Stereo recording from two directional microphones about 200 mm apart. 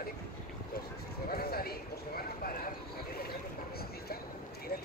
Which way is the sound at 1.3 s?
50° left (ahead or behind).